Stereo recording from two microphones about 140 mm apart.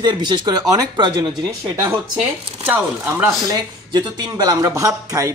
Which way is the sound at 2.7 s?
10° right (ahead or behind).